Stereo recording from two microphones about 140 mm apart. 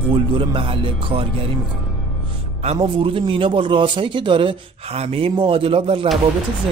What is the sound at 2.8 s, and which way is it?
Speech, 40° right (ahead or behind).